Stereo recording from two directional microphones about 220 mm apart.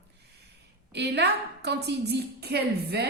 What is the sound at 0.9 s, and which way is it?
A woman's voice, 50° right (ahead or behind).